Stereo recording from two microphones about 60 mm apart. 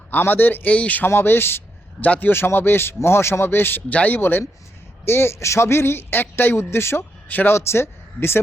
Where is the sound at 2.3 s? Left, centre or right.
Left.